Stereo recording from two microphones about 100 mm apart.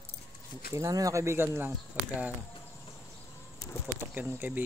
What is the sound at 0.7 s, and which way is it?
Speech, 35° right (ahead or behind).